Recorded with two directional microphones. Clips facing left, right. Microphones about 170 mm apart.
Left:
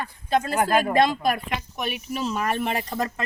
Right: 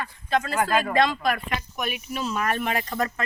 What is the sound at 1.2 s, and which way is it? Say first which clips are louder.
Speech: left 1 dB; 15° left (ahead or behind).